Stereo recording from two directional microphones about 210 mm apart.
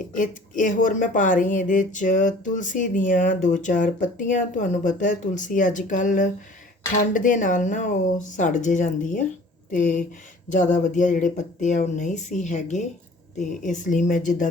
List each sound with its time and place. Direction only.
0.1 s speech: 40° left (ahead or behind)